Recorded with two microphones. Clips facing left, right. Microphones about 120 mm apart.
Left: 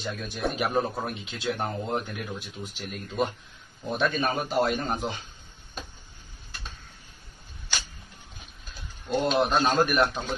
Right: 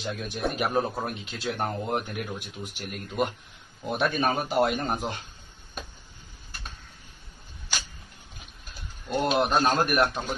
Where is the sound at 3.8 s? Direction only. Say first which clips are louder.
Right 1 dB; 15° right (ahead or behind).